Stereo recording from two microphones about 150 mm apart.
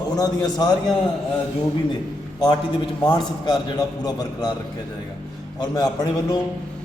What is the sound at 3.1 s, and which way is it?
A man's voice, 30° left (ahead or behind).